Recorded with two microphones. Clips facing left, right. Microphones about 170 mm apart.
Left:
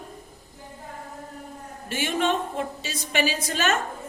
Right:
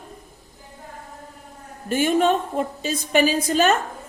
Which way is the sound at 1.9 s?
50° right (ahead or behind).